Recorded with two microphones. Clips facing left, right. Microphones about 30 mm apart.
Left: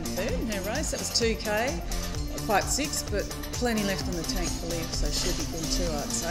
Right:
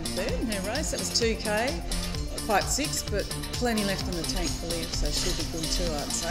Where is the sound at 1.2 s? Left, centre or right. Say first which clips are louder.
Even; centre.